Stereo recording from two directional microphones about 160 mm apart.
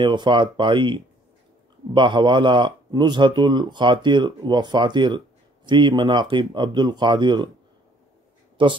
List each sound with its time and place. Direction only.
0.0 s a man's voice: 30° right (ahead or behind)
8.6 s speech: 30° right (ahead or behind)